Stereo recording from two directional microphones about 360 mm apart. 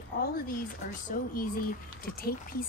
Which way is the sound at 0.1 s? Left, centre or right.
Left.